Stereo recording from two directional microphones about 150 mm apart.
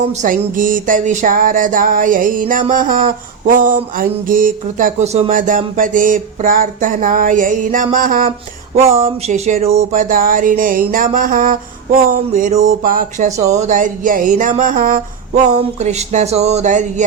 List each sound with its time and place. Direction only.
0.1 s music: 60° right (ahead or behind)
5.3 s music: 60° right (ahead or behind)
9.0 s music: 50° right (ahead or behind); by 11.5 s 65° right (ahead or behind)
12.4 s music: 55° right (ahead or behind)
15.5 s speech: 50° right (ahead or behind)